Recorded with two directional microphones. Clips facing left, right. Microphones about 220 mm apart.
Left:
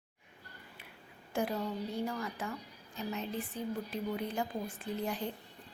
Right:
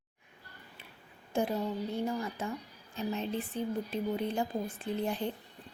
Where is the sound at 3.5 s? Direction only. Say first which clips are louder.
Right 5 dB; 25° right (ahead or behind).